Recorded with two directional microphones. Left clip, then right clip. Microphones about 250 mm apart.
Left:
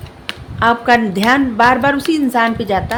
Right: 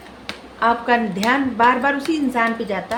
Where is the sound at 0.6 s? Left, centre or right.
Left.